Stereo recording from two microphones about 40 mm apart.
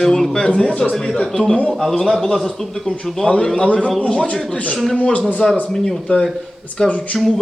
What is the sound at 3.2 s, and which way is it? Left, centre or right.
Speech, centre.